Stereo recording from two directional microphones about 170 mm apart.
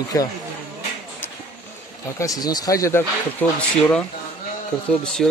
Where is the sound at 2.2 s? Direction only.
20° left (ahead or behind).